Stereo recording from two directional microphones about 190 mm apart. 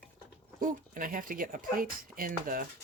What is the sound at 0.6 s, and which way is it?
Speech, 45° right (ahead or behind).